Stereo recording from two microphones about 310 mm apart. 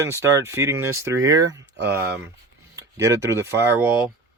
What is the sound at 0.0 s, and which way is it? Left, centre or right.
Speech, centre.